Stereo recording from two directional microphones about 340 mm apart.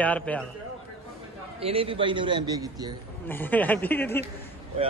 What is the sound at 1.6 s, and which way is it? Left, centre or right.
A man's voice, centre.